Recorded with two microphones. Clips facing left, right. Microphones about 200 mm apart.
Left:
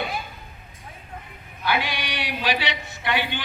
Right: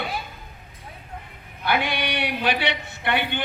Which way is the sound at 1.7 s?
60° right (ahead or behind).